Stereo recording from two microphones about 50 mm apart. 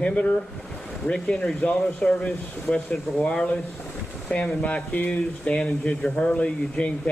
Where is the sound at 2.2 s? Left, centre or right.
Left.